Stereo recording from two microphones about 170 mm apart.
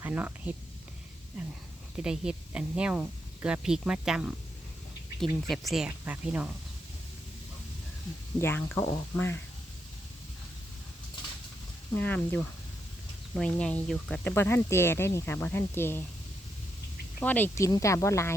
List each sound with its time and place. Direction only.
0.0 s speech: 10° right (ahead or behind)
2.0 s speech: 5° right (ahead or behind)
5.5 s speech: centre (ahead or behind)
8.4 s speech: 10° left (ahead or behind)
11.9 s speech: 10° left (ahead or behind)
17.2 s speech: 10° left (ahead or behind)